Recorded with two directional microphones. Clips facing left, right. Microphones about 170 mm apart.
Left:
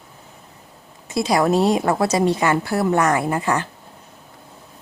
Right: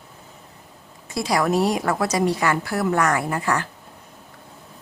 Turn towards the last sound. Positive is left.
turn(degrees=20)  # may be behind; listen again after turning